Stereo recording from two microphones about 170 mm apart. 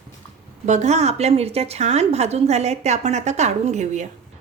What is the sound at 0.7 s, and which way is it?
A woman's voice, 40° right (ahead or behind).